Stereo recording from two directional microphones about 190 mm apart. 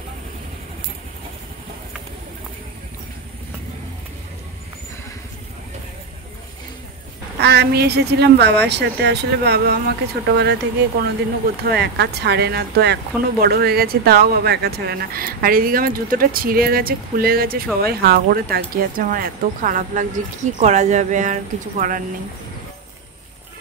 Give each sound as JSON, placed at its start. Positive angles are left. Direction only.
{"t": 7.3, "sound": "speech", "side_deg": -60}
{"t": 11.7, "sound": "speech", "side_deg": -60}